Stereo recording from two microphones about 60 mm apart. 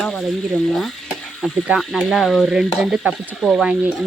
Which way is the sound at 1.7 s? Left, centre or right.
Right.